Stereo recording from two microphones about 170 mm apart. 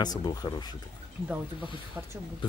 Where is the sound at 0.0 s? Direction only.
20° left (ahead or behind).